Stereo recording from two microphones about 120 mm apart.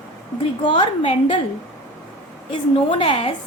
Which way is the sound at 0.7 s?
45° left (ahead or behind).